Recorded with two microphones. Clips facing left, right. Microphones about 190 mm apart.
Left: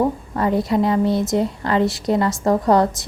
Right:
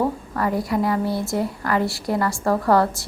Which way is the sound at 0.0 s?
20° left (ahead or behind).